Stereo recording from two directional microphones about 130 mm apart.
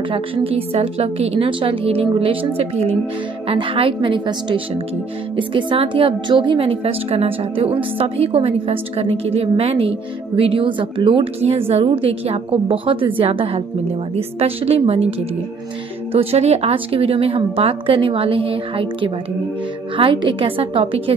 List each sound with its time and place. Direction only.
0.1 s a woman's voice: 45° right (ahead or behind)